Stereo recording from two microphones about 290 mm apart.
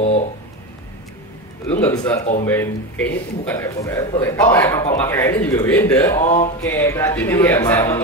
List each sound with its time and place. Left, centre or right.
1.7 s a man's voice: centre
2.1 s speech: left
2.4 s a man's voice: centre
6.2 s speech: left
6.7 s a man's voice: centre